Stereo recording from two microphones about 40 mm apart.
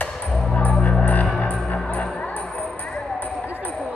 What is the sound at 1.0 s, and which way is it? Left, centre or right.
Music, left.